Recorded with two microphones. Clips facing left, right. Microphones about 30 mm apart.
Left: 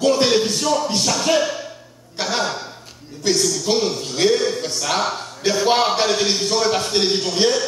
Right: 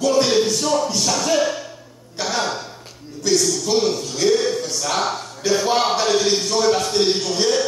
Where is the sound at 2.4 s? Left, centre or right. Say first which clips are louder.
Even; centre.